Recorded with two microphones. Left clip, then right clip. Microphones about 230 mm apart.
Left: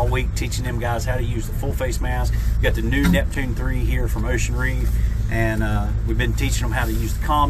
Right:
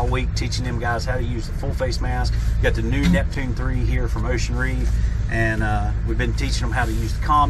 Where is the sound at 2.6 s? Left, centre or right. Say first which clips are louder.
Left 1 dB; left.